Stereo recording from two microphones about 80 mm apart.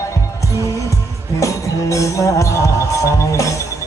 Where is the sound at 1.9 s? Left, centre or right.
Left.